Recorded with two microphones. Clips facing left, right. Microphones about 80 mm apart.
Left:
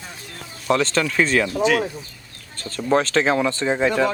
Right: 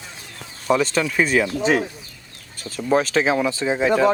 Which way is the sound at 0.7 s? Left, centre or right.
Centre.